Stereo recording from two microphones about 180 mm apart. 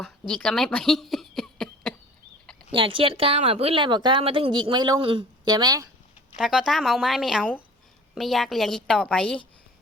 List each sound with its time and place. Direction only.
0.0 s a sound: 5° left (ahead or behind)
2.7 s a woman's voice: 30° right (ahead or behind)
6.3 s a woman's voice: 5° right (ahead or behind)